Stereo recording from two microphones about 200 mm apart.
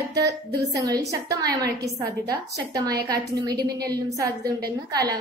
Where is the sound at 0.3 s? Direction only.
15° right (ahead or behind).